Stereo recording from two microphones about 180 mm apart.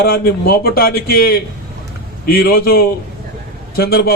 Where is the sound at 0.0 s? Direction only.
60° left (ahead or behind).